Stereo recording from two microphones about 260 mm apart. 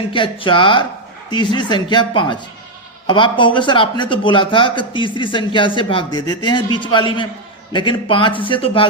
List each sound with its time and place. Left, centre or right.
0.1 s speech: centre